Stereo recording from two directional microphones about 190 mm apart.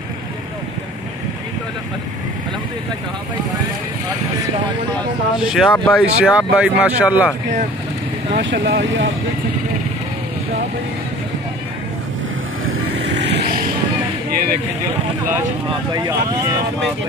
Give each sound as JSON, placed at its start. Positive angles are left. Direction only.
{"t": 5.4, "sound": "speech", "side_deg": 0}
{"t": 6.2, "sound": "speech", "side_deg": -5}
{"t": 8.4, "sound": "speech", "side_deg": -65}
{"t": 13.2, "sound": "vehicle", "side_deg": -55}
{"t": 14.3, "sound": "a sound", "side_deg": -50}
{"t": 15.9, "sound": "speech", "side_deg": -20}